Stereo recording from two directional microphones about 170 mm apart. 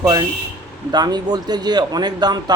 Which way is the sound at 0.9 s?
25° right (ahead or behind).